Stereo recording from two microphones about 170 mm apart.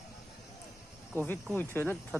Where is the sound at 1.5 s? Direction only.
10° left (ahead or behind).